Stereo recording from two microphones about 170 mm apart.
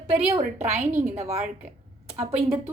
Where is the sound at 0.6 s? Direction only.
45° right (ahead or behind).